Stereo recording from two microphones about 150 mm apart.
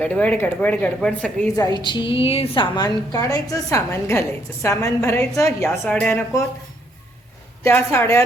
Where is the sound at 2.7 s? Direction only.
25° left (ahead or behind).